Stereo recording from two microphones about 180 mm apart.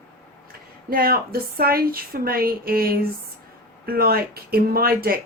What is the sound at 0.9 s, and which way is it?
A woman's voice, 55° right (ahead or behind).